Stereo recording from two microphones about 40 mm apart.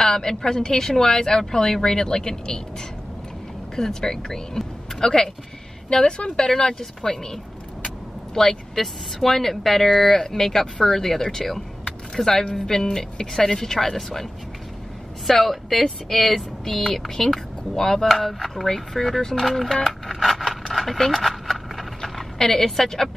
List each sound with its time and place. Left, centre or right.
0.0 s a woman's voice: centre
3.7 s a woman's voice: centre
8.4 s a woman's voice: centre
15.2 s a woman's voice: centre
21.3 s a sound: centre
22.4 s a woman's voice: centre